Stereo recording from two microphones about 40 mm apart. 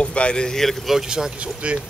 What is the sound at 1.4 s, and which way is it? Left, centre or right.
Speech, right.